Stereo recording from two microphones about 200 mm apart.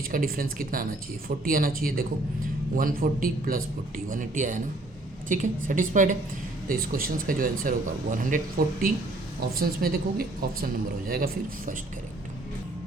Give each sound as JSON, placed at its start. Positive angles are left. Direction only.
{"t": 0.1, "sound": "a woman's voice", "side_deg": -45}